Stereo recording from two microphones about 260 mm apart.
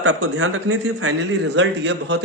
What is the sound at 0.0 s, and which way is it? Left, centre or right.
A man's voice, right.